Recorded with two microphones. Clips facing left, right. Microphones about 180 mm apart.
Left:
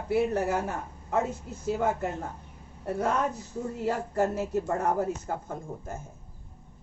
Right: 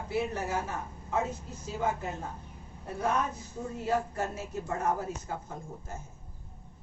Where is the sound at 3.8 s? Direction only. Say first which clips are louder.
Left 4 dB; 65° left (ahead or behind).